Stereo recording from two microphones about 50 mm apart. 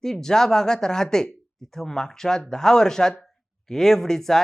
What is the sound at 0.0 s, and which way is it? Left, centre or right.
Speech, centre.